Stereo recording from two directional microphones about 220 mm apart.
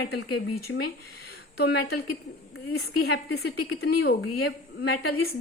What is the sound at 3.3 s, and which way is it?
A woman's voice, 45° left (ahead or behind).